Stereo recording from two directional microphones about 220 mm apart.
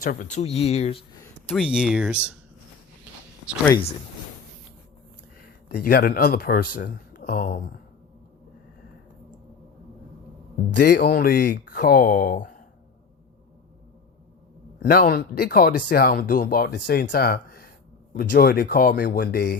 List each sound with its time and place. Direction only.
0.0 s speech: 40° left (ahead or behind)
1.5 s speech: 5° right (ahead or behind)
5.6 s speech: 45° left (ahead or behind)
10.8 s speech: 50° left (ahead or behind)
14.8 s speech: 45° left (ahead or behind)